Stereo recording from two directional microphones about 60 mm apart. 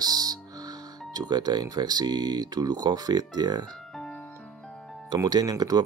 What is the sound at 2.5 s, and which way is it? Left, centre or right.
Speech, right.